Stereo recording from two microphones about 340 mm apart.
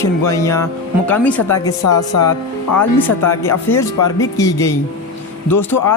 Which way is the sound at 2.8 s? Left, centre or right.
Centre.